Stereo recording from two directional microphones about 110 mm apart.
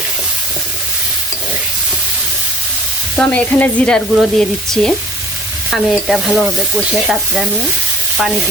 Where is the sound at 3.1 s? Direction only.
10° left (ahead or behind).